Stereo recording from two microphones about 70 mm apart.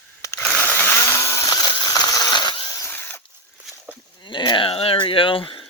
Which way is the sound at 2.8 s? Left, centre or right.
Left.